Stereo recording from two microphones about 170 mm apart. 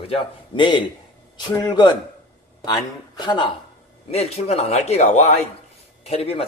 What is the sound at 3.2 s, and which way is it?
Speech, 25° left (ahead or behind).